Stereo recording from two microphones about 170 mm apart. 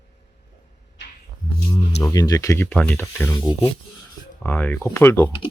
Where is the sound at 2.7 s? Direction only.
10° left (ahead or behind).